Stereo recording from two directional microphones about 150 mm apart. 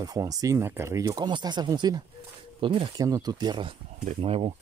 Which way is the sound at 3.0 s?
25° right (ahead or behind).